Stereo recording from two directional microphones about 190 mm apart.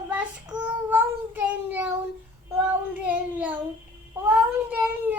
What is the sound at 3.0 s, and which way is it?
Speech, 10° right (ahead or behind).